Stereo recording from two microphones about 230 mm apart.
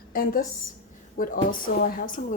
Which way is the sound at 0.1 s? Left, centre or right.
Left.